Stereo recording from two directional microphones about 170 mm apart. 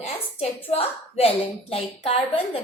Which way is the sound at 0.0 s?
35° left (ahead or behind).